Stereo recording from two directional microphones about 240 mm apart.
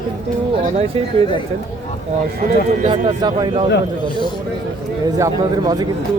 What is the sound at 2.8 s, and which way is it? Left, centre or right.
Speech, right.